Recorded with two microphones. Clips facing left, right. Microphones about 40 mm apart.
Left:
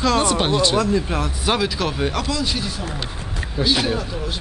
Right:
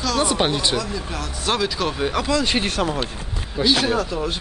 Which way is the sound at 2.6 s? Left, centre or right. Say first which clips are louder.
Right 6 dB; right.